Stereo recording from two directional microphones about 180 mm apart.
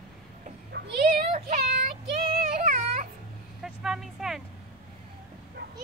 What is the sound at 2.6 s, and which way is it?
Baby cry, 45° right (ahead or behind).